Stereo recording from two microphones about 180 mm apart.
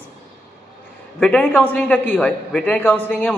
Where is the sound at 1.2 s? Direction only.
5° left (ahead or behind).